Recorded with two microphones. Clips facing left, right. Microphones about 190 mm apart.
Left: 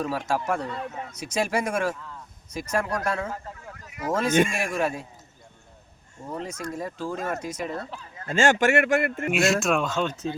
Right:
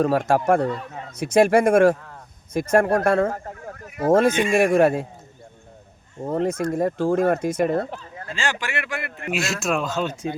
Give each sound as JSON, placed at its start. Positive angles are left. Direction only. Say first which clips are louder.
{"t": 0.0, "sound": "speech", "louder": "right 8 dB", "side_deg": -55}
{"t": 6.2, "sound": "speech", "louder": "right 10 dB", "side_deg": -55}
{"t": 8.3, "sound": "a man's voice", "louder": "left 8 dB", "side_deg": 45}
{"t": 9.3, "sound": "speech", "louder": "left 1 dB", "side_deg": 0}